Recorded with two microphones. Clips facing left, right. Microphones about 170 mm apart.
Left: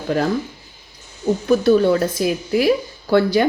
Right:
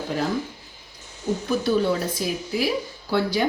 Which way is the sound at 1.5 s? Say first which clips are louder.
Left 8 dB; 65° left (ahead or behind).